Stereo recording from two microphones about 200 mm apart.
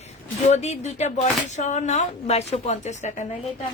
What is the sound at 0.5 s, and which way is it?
Speech, 35° left (ahead or behind).